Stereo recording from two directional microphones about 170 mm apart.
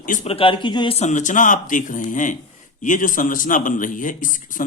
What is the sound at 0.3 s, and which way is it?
A man's voice, 30° left (ahead or behind).